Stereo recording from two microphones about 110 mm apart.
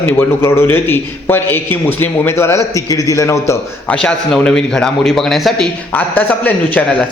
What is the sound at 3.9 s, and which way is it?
A man's voice, 5° left (ahead or behind).